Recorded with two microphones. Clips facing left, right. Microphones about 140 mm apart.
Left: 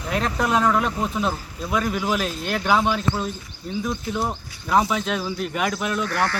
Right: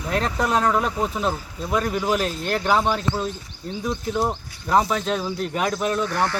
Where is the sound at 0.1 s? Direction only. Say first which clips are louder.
Even; 5° left (ahead or behind).